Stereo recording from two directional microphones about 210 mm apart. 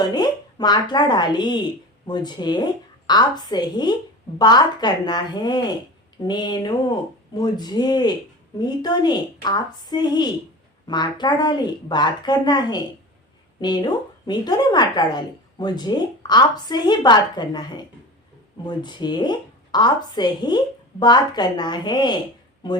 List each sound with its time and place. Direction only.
0.1 s a woman's voice: 20° left (ahead or behind)